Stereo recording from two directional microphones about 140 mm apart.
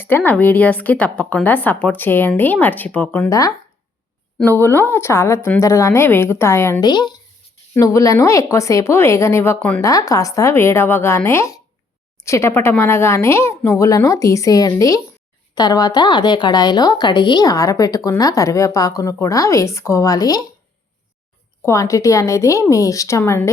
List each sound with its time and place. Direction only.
0.0 s a woman's voice: 15° left (ahead or behind)
3.2 s a woman's voice: 25° left (ahead or behind)
9.8 s speech: 25° left (ahead or behind)
21.6 s speech: 20° left (ahead or behind)